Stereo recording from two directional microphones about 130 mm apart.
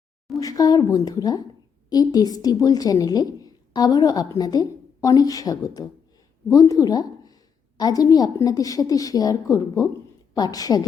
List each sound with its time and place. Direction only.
0.3 s a woman's voice: 25° left (ahead or behind)